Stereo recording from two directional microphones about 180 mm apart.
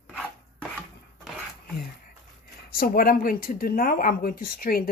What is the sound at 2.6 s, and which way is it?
Speech, 55° left (ahead or behind).